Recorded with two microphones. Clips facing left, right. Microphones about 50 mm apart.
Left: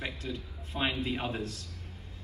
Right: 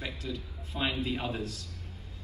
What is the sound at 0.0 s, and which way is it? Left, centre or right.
A man's voice, left.